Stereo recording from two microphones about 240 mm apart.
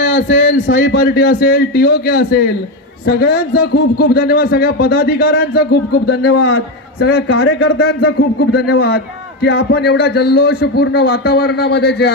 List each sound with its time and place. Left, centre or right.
0.0 s a man's voice: left
1.0 s a man's voice: left
7.7 s a man's voice: left